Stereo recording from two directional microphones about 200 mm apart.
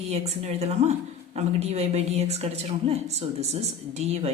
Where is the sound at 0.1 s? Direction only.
35° right (ahead or behind).